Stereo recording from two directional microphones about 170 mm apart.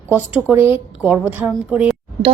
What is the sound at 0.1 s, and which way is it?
A woman's voice, 10° right (ahead or behind).